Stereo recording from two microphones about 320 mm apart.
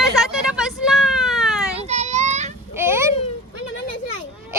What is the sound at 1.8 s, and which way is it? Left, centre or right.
Children playing, right.